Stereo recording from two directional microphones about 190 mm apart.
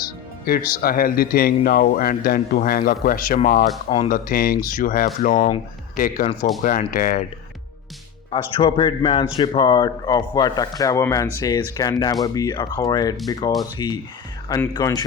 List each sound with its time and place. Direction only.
0.4 s speech: 50° left (ahead or behind)
3.8 s speech: 30° left (ahead or behind)
4.1 s speech: 50° left (ahead or behind)
6.6 s speech: 45° left (ahead or behind)
8.3 s speech: 30° left (ahead or behind)